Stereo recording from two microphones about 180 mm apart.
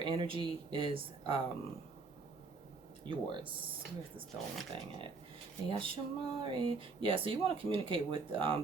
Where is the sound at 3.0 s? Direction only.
30° right (ahead or behind).